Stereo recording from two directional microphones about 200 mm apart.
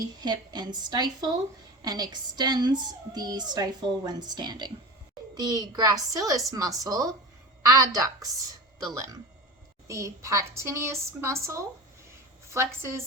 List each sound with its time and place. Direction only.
0.2 s a woman's voice: 20° right (ahead or behind)
9.8 s a woman's voice: 15° right (ahead or behind)